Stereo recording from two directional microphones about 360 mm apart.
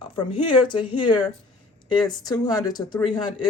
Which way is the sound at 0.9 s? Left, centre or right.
Left.